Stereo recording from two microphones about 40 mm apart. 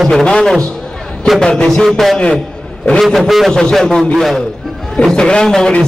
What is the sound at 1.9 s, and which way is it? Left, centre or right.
A man's voice, centre.